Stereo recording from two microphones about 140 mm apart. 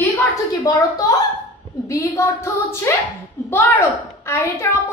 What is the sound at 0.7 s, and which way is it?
A woman's voice, 25° left (ahead or behind).